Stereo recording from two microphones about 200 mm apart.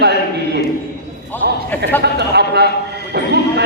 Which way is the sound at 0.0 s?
55° right (ahead or behind).